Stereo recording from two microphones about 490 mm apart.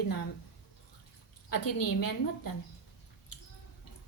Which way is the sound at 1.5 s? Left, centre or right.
Left.